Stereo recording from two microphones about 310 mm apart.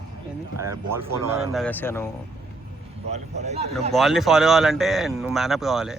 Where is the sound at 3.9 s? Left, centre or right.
Centre.